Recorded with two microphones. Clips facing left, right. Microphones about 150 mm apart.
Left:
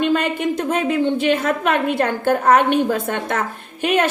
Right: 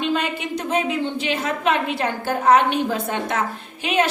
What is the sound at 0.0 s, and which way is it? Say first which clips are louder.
A woman's voice: left 5 dB; 50° left (ahead or behind).